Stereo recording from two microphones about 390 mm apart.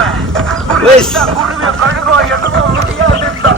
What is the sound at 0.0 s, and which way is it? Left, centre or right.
Bow-wow, centre.